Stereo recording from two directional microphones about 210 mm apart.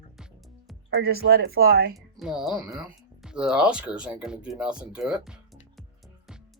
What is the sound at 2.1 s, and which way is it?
Speech, centre (ahead or behind).